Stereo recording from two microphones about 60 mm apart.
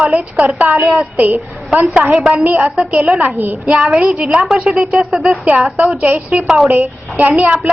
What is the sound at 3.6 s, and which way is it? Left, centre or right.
Speech, right.